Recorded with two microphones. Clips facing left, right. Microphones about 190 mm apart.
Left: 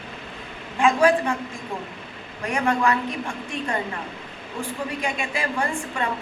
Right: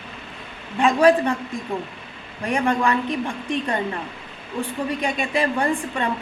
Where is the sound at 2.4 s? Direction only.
30° right (ahead or behind).